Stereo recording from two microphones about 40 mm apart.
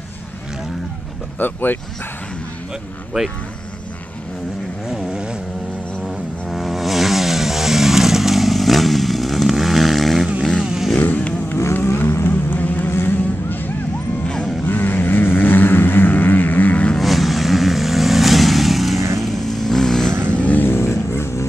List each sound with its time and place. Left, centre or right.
1.4 s speech: left
3.1 s speech: centre
4.8 s vehicle: centre
5.1 s vehicle: right
6.0 s vehicle: centre
10.6 s motorcycle: centre
11.5 s vehicle: left
12.3 s vehicle: left
12.8 s vehicle: left
14.7 s vehicle: left
17.0 s vehicle: centre
19.4 s vehicle: centre
20.3 s vehicle: left
20.6 s vehicle: left